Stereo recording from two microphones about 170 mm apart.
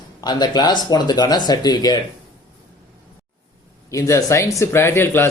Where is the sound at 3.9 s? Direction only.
20° left (ahead or behind).